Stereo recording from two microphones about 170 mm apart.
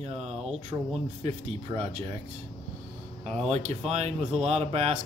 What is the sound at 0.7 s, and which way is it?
Speech, 20° right (ahead or behind).